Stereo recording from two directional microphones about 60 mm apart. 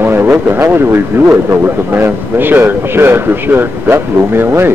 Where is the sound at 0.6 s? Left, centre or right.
Right.